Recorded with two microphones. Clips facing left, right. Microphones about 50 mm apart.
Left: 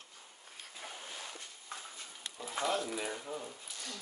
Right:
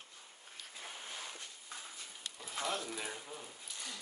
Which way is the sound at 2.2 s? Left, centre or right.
Centre.